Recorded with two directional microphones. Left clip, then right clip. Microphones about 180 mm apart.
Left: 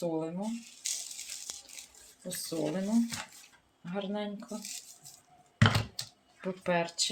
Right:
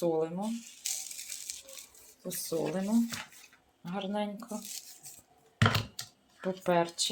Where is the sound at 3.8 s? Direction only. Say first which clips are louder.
Right 1 dB; 15° right (ahead or behind).